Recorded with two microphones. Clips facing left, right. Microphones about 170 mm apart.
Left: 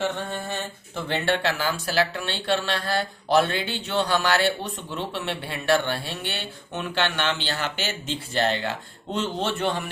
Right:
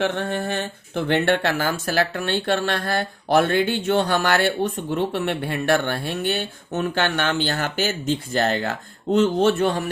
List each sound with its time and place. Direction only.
0.0 s speech: 65° right (ahead or behind); by 9.9 s 45° right (ahead or behind)